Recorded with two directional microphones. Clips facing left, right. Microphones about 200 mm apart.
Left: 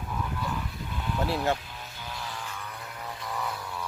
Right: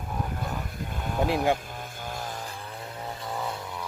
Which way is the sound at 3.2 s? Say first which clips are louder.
Right 1 dB; 25° right (ahead or behind).